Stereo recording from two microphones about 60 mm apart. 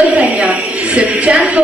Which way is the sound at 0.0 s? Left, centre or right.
Right.